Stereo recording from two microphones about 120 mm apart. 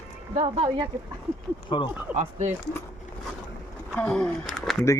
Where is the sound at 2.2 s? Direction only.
75° right (ahead or behind).